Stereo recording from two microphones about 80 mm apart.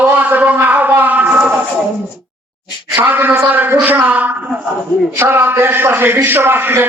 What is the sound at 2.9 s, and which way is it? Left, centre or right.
A man's voice, right.